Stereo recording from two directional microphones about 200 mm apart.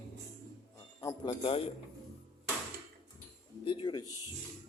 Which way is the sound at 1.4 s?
30° left (ahead or behind).